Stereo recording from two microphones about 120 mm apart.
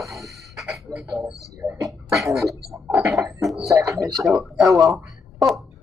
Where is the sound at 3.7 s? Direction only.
25° right (ahead or behind).